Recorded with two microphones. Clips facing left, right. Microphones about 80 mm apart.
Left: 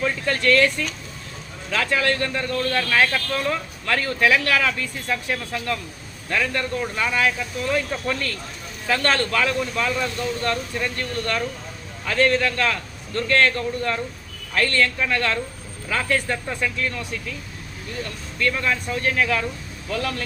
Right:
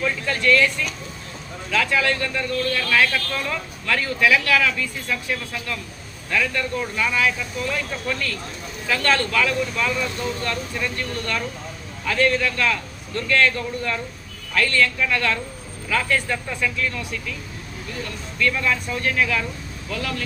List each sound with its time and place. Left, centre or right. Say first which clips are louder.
0.3 s speech: left 1 dB; left
18.3 s speech: right 1 dB; left